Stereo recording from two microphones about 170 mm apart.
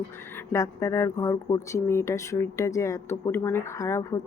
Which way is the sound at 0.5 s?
20° left (ahead or behind).